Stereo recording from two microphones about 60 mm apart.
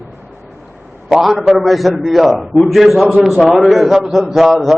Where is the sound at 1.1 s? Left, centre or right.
Centre.